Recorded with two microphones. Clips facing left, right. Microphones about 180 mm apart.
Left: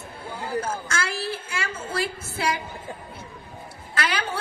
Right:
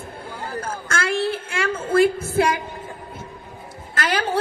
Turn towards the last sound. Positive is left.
turn(degrees=-40)  # may be behind; listen again after turning